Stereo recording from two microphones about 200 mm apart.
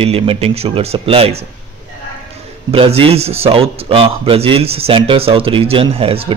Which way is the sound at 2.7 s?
30° right (ahead or behind).